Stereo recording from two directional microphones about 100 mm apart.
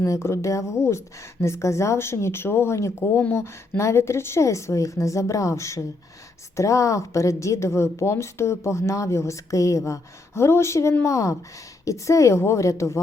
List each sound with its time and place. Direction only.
0.0 s a woman's voice: 25° left (ahead or behind)